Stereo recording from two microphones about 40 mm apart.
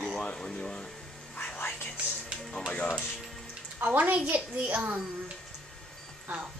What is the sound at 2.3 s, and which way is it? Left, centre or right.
Music, right.